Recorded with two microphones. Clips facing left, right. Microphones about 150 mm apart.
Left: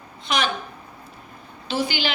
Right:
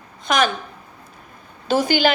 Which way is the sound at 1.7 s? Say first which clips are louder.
Right 8 dB; 45° right (ahead or behind).